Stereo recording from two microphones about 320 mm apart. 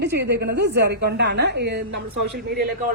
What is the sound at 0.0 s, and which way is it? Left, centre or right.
A woman's voice, right.